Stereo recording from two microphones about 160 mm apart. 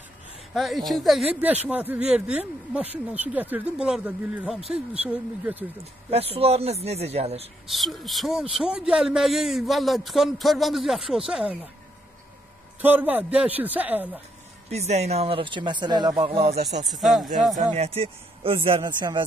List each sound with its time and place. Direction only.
0.6 s a man's voice: centre (ahead or behind)
6.0 s a man's voice: 40° right (ahead or behind)
7.6 s a man's voice: centre (ahead or behind)
12.8 s speech: 10° right (ahead or behind)
14.7 s a man's voice: 45° right (ahead or behind); by 16.3 s 25° right (ahead or behind)
16.3 s a man's voice: 40° right (ahead or behind)
16.8 s a man's voice: centre (ahead or behind)
17.6 s a man's voice: 40° right (ahead or behind)